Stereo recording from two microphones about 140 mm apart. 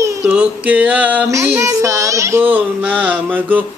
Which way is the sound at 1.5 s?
20° right (ahead or behind).